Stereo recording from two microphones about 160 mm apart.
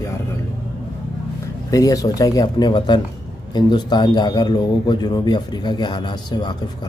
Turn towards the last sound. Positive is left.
turn(degrees=30)  # may be behind; listen again after turning